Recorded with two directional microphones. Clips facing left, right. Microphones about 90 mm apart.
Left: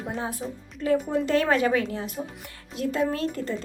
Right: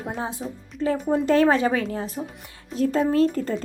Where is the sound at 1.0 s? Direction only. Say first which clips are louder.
Right 5 dB; 35° right (ahead or behind).